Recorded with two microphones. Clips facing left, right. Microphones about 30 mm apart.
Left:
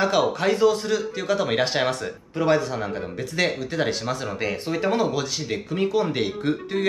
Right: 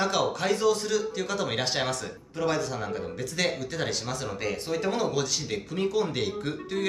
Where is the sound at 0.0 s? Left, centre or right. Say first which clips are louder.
Left 6 dB; centre.